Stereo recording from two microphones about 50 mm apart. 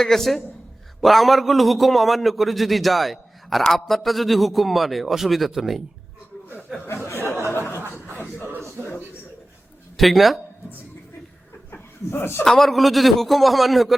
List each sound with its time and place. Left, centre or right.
0.0 s a woman's voice: centre
6.8 s a sound: left
7.5 s chuckle: left
10.0 s a man's voice: centre
11.7 s chuckle: left
12.5 s a man's voice: centre